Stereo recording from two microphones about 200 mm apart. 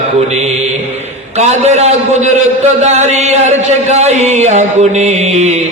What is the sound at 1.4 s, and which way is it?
A man's voice, 35° right (ahead or behind).